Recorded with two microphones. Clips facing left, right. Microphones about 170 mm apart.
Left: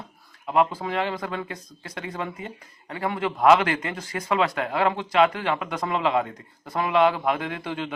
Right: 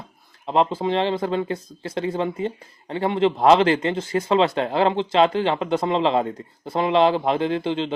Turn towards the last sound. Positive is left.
turn(degrees=-25)  # may be behind; listen again after turning